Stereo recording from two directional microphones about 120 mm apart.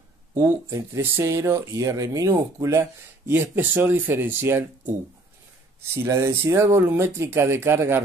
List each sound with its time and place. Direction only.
0.3 s speech: 25° right (ahead or behind)